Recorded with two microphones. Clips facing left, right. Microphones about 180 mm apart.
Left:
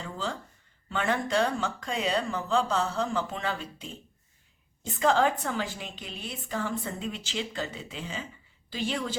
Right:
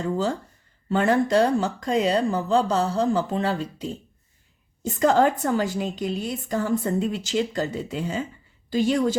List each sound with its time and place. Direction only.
0.0 s a woman's voice: 40° right (ahead or behind)